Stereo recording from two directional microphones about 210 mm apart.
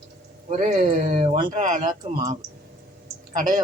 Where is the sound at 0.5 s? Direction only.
40° right (ahead or behind).